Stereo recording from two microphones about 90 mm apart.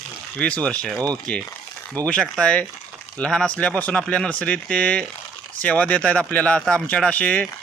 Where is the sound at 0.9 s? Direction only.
50° right (ahead or behind).